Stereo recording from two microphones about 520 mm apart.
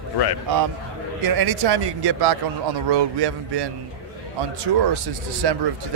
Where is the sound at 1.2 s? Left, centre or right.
Right.